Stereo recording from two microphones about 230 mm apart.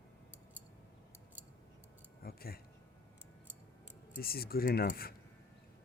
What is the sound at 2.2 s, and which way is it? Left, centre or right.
Speech, left.